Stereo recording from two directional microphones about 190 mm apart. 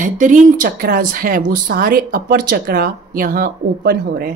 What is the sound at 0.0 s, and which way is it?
A woman's voice, 45° right (ahead or behind).